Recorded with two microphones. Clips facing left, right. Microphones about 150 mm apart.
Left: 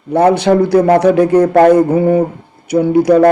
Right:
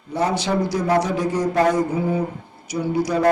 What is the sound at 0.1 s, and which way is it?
A man's voice, 60° left (ahead or behind).